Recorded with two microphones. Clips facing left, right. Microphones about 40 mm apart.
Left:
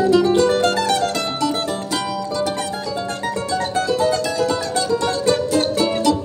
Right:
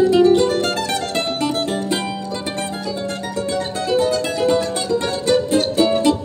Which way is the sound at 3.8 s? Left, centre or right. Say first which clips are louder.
Right 1 dB; right.